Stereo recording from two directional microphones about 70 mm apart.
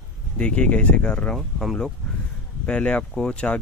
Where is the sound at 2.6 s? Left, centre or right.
Centre.